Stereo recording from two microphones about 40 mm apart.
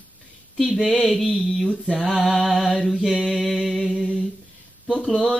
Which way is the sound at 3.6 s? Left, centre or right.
Centre.